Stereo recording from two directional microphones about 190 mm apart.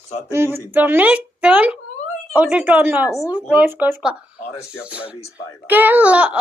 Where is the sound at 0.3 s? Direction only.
15° right (ahead or behind).